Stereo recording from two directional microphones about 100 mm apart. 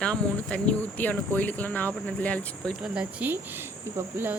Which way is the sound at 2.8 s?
10° right (ahead or behind).